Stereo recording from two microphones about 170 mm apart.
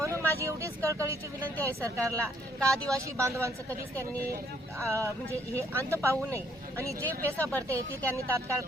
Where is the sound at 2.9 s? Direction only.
20° right (ahead or behind).